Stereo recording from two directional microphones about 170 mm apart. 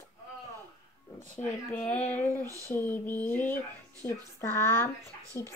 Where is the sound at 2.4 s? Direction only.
20° right (ahead or behind).